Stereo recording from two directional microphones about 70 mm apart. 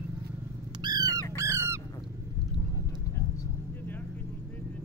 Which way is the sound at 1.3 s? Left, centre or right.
Right.